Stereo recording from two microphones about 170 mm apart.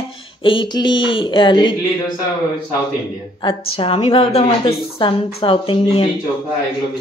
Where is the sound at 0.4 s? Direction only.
30° left (ahead or behind).